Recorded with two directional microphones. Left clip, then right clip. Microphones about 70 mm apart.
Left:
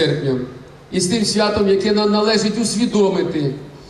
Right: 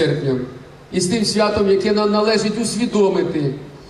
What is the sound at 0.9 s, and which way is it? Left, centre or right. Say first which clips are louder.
A man's voice: even; centre.